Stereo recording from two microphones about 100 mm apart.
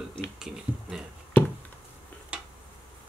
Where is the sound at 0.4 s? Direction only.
5° right (ahead or behind).